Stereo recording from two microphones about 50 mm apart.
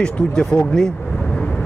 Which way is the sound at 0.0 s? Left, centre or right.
Centre.